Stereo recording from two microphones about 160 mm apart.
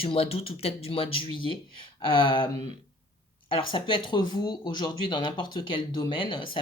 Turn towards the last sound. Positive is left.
turn(degrees=30)  # may be behind; listen again after turning